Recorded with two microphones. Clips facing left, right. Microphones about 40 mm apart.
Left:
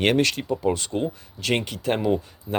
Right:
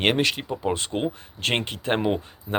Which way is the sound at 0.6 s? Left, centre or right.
Right.